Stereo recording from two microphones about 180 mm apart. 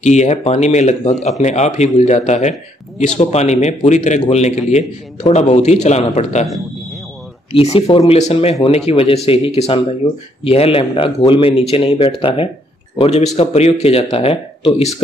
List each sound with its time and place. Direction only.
0.0 s speech: 40° left (ahead or behind)
7.5 s speech: 30° left (ahead or behind)